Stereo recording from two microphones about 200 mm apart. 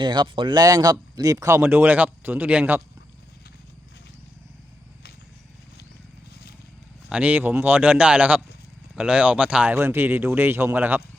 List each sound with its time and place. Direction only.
0.0 s speech: 20° right (ahead or behind)
7.1 s speech: 5° right (ahead or behind)